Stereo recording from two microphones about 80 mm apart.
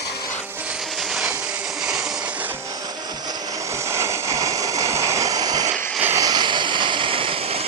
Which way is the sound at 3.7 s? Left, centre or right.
Right.